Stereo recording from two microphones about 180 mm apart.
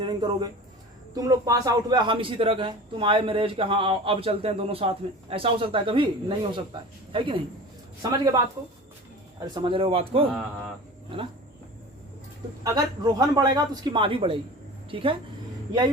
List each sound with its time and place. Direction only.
0.0 s a man's voice: 25° right (ahead or behind)
9.4 s a man's voice: 25° right (ahead or behind)
12.6 s a man's voice: 20° right (ahead or behind)